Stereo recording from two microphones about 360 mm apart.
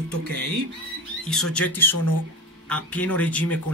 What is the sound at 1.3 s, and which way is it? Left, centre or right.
A man's voice, centre.